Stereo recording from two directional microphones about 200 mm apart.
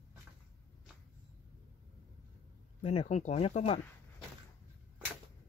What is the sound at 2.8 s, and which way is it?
Speech, 30° left (ahead or behind).